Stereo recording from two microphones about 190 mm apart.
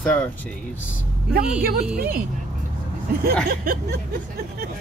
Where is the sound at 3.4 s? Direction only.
55° right (ahead or behind).